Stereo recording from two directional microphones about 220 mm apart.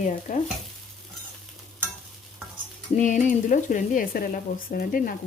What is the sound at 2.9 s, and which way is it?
A woman's voice, 35° left (ahead or behind).